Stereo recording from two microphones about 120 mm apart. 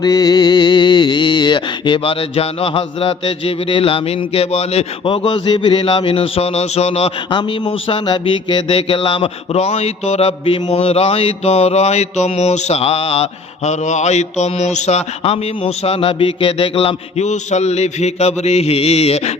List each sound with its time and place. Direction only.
0.0 s music: 35° left (ahead or behind); by 7.1 s 60° left (ahead or behind)
7.3 s music: 40° left (ahead or behind)
10.7 s speech: 60° left (ahead or behind)
13.7 s speech: 70° left (ahead or behind)